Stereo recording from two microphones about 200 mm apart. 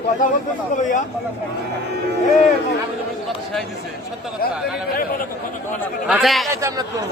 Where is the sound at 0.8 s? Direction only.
40° left (ahead or behind).